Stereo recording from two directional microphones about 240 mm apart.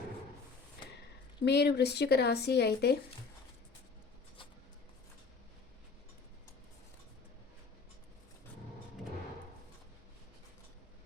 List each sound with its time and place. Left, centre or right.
1.5 s speech: left